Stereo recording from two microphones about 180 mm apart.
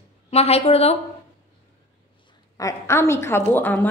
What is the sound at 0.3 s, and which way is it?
Speech, 35° left (ahead or behind).